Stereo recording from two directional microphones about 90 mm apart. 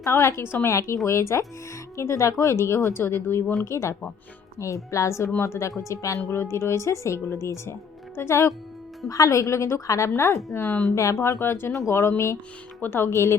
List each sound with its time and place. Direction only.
0.0 s speech: 30° left (ahead or behind)